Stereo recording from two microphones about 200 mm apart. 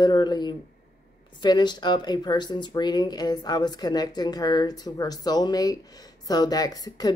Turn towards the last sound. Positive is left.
turn(degrees=20)  # may be behind; listen again after turning